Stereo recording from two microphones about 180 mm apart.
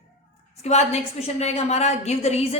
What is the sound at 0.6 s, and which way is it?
A woman's voice, 40° left (ahead or behind).